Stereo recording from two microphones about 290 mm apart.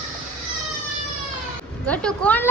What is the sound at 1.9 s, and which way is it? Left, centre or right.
Speech, centre.